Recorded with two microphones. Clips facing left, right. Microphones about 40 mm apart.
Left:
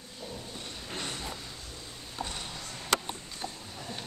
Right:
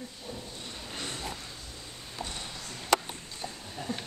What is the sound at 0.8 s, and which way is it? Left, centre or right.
Vehicle, centre.